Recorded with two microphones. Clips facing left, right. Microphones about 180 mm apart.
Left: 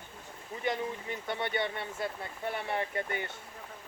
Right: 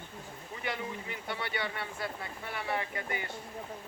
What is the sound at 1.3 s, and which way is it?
Speech, 20° left (ahead or behind).